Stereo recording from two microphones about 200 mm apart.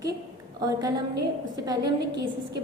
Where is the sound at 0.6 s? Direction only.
20° right (ahead or behind).